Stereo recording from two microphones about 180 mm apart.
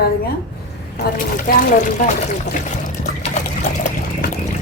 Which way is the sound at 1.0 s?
60° left (ahead or behind).